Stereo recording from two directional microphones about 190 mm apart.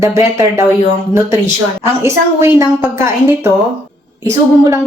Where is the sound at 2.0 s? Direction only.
15° right (ahead or behind).